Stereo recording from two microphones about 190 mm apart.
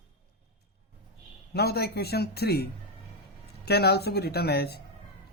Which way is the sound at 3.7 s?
60° left (ahead or behind).